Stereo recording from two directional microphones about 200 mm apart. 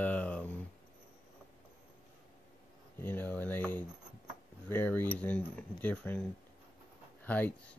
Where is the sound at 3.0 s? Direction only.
10° left (ahead or behind).